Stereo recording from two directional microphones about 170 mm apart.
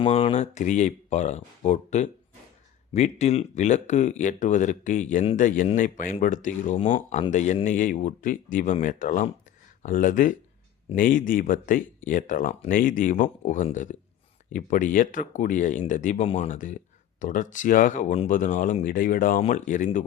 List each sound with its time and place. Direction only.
0.0 s speech: 35° left (ahead or behind); by 6.7 s 50° left (ahead or behind)
6.7 s speech: 30° left (ahead or behind)
7.1 s speech: 45° left (ahead or behind)